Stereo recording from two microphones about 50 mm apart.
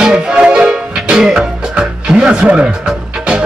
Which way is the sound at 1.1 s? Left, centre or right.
Centre.